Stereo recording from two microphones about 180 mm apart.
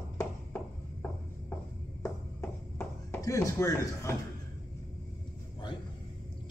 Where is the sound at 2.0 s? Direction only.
15° left (ahead or behind).